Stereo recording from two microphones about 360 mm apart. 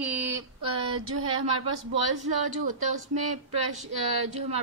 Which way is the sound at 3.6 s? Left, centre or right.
Right.